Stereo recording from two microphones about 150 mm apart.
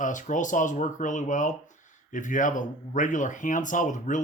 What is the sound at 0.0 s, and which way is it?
Speech, 60° left (ahead or behind).